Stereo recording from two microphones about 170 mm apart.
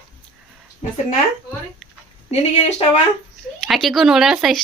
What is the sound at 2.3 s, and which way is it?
Speech, 40° left (ahead or behind).